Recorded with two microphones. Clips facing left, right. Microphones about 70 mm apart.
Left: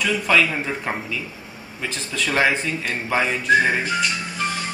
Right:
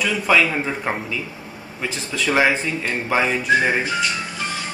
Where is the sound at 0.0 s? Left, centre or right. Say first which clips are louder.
Right 1 dB; centre.